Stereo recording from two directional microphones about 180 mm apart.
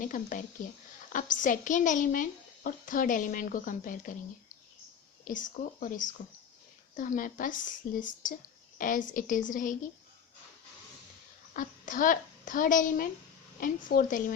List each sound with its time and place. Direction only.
0.0 s a woman's voice: 50° left (ahead or behind)
5.2 s a woman's voice: 45° left (ahead or behind)
11.5 s a woman's voice: 50° left (ahead or behind)